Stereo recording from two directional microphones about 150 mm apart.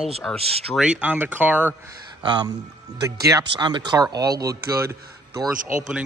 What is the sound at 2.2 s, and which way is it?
Speech, 30° right (ahead or behind).